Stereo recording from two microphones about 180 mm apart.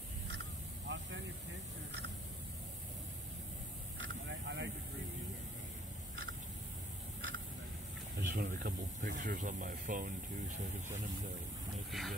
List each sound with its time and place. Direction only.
0.4 s vehicle: 90° right
4.0 s vehicle: 90° right
8.2 s speech: 55° right (ahead or behind)
11.9 s speech: centre (ahead or behind)